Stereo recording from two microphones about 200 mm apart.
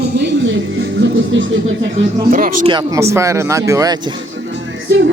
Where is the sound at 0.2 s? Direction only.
65° right (ahead or behind).